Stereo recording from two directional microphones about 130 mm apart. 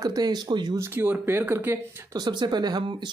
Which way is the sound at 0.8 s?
15° right (ahead or behind).